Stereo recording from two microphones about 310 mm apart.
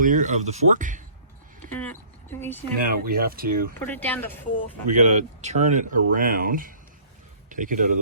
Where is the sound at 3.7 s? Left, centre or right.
Centre.